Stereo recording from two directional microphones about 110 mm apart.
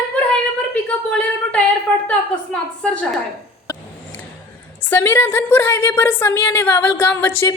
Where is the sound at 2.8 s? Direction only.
10° left (ahead or behind).